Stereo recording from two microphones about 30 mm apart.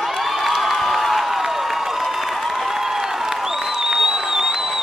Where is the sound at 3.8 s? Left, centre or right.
Centre.